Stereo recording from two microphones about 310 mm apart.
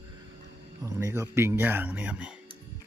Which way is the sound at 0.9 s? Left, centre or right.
Centre.